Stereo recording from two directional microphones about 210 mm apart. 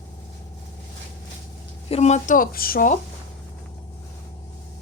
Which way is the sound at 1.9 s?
30° left (ahead or behind).